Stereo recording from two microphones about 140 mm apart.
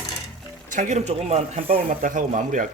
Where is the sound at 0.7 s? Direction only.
60° right (ahead or behind); by 1.8 s 45° right (ahead or behind).